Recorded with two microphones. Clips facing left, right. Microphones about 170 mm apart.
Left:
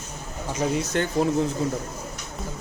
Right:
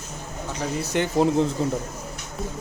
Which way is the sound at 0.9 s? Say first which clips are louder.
Right 4 dB; 15° right (ahead or behind).